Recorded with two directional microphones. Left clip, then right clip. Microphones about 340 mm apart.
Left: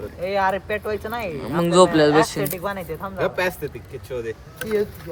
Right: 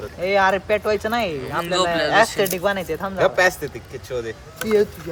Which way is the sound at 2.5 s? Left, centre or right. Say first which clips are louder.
Right 6 dB; right.